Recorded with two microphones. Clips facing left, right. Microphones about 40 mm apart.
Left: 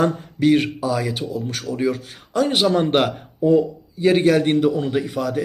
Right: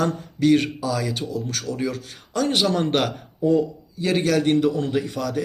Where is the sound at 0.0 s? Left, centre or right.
Centre.